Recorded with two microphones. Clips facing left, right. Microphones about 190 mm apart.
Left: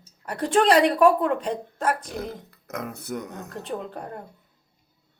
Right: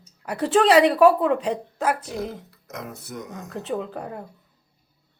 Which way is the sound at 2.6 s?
60° left (ahead or behind).